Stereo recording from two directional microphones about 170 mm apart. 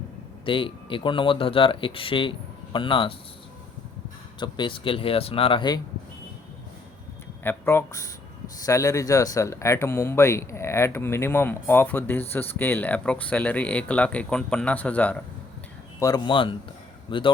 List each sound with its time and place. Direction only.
0.4 s speech: 30° left (ahead or behind)
4.4 s speech: 25° left (ahead or behind)
7.4 s speech: 15° left (ahead or behind)
16.0 s speech: 20° left (ahead or behind)